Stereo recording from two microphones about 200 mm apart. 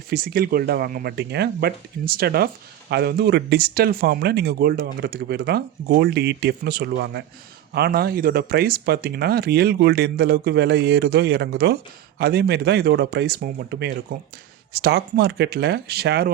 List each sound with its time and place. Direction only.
0.1 s speech: 50° right (ahead or behind)